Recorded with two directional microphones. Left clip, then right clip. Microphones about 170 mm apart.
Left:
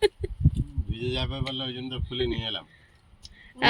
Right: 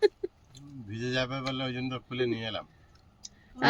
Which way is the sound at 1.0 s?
20° right (ahead or behind).